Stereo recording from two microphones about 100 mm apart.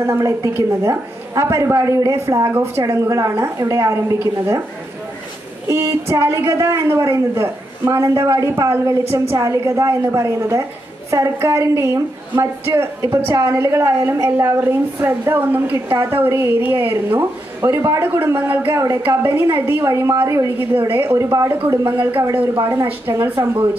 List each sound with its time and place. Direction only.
0.0 s a woman's voice: 30° right (ahead or behind)
5.7 s a woman's voice: 30° right (ahead or behind)
22.6 s a woman's voice: 25° right (ahead or behind)